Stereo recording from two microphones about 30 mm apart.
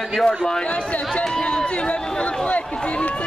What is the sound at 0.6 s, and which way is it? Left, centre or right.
Speech, left.